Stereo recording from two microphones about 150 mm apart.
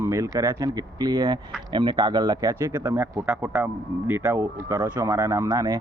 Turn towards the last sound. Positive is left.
turn(degrees=-25)  # may be behind; listen again after turning